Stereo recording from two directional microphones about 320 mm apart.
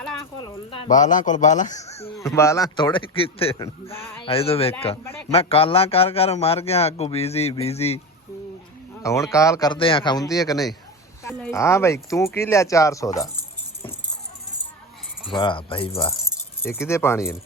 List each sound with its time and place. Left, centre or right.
0.3 s a man's voice: centre
0.9 s a man's voice: left
2.1 s a man's voice: centre
9.3 s a man's voice: centre
15.3 s a man's voice: centre